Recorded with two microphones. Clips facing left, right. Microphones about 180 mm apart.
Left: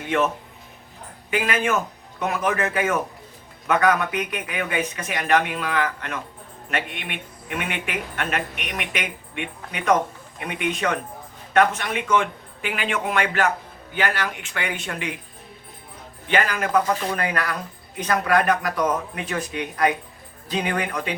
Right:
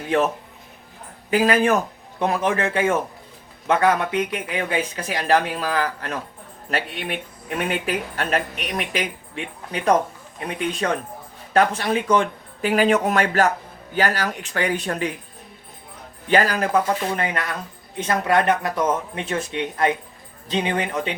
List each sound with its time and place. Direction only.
0.1 s speech: 35° right (ahead or behind)
1.3 s speech: 35° right (ahead or behind)
10.4 s speech: 35° right (ahead or behind)
16.3 s speech: 35° right (ahead or behind)